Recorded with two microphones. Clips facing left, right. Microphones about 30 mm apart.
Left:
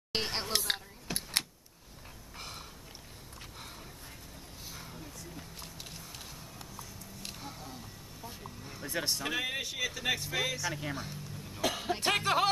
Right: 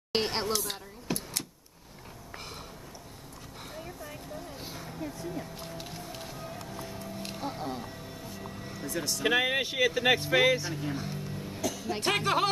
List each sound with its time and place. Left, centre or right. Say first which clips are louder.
0.1 s chatter: right 5 dB; centre
0.7 s power windows: left 5 dB; left
1.1 s a sound: right 5 dB; centre
2.3 s a sound: right 2 dB; centre
4.7 s a sound: right 5 dB; centre
5.0 s a sound: right 10 dB; right
5.6 s music: right 6 dB; centre
6.4 s music: right 8 dB; right
8.8 s speech: even; left
9.2 s speech: right 8 dB; right
10.7 s speech: right 3 dB; centre
11.3 s music: right 6 dB; right
11.6 s music: left 2 dB; left
11.9 s music: right 2 dB; centre